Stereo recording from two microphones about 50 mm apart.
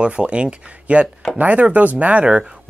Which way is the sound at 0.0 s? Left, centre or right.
Centre.